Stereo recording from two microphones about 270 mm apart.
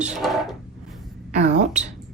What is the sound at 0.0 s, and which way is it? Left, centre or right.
Speech, centre.